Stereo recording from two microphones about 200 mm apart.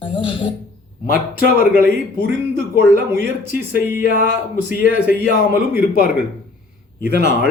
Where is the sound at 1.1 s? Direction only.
45° left (ahead or behind).